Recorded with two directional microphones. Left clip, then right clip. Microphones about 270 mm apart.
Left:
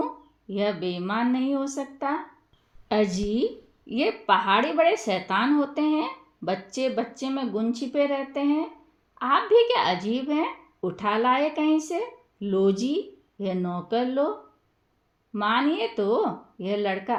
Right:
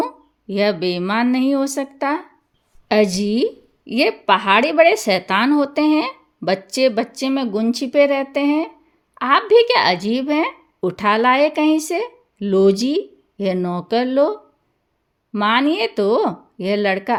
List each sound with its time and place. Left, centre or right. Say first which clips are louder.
0.0 s a woman's voice: right 7 dB; right